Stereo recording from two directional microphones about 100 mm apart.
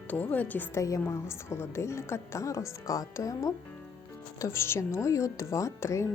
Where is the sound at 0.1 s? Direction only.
15° left (ahead or behind).